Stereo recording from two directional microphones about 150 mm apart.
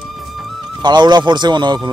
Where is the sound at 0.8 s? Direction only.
30° right (ahead or behind).